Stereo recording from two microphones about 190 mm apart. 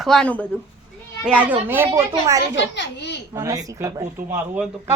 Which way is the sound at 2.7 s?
65° left (ahead or behind).